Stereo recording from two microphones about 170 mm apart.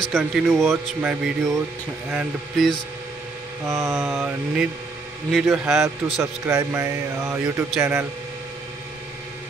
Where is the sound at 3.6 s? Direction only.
15° right (ahead or behind).